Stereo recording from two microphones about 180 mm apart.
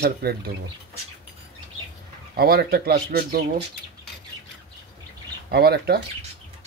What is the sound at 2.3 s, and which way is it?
Speech, 55° right (ahead or behind).